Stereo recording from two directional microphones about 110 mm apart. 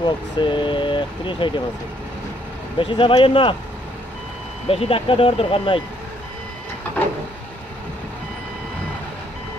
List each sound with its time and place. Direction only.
0.0 s speech: 45° left (ahead or behind)
2.8 s speech: 50° left (ahead or behind)
4.6 s speech: 60° left (ahead or behind)